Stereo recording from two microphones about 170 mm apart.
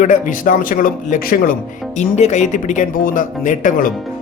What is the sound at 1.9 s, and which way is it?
Speech, 45° left (ahead or behind).